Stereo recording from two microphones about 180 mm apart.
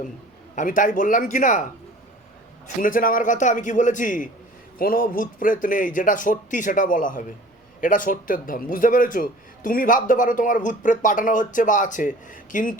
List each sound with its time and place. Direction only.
0.5 s a man's voice: 45° left (ahead or behind)
2.8 s a man's voice: 50° left (ahead or behind)